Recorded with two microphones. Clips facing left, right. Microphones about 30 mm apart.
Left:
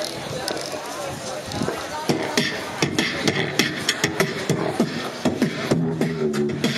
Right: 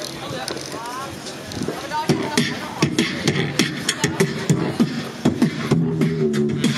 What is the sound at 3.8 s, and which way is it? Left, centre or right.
Beatboxing, centre.